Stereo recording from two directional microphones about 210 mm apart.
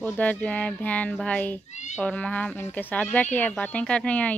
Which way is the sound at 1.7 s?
35° left (ahead or behind).